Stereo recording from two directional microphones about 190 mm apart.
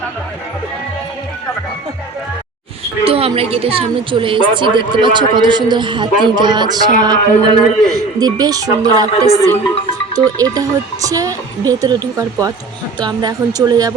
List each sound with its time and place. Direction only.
3.0 s a woman's voice: 30° right (ahead or behind)